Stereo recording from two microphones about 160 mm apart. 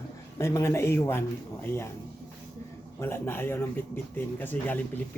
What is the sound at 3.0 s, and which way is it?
Speech, 15° left (ahead or behind).